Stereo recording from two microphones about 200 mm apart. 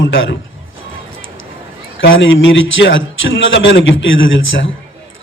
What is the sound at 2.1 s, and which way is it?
Speech, 70° left (ahead or behind).